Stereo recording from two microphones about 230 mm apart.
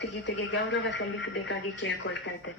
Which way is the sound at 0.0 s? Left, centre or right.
Left.